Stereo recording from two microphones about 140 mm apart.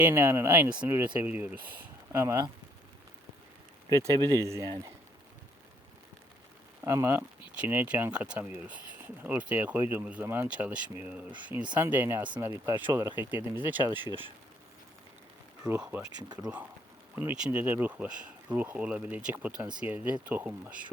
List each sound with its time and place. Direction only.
0.0 s speech: 15° right (ahead or behind)
3.8 s speech: 25° right (ahead or behind)
6.8 s speech: 20° right (ahead or behind)
15.6 s speech: 20° right (ahead or behind)
17.2 s speech: 10° right (ahead or behind)